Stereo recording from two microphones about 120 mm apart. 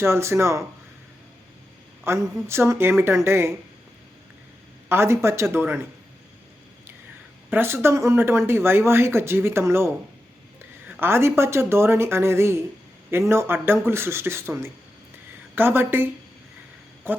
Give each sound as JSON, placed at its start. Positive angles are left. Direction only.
{"t": 0.0, "sound": "speech", "side_deg": -20}
{"t": 2.0, "sound": "speech", "side_deg": -20}
{"t": 4.9, "sound": "speech", "side_deg": -20}
{"t": 7.5, "sound": "speech", "side_deg": -20}
{"t": 11.0, "sound": "a woman's voice", "side_deg": -20}
{"t": 17.1, "sound": "speech", "side_deg": -20}